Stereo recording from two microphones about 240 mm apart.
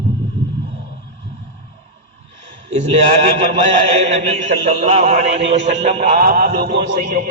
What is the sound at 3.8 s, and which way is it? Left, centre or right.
Speech, right.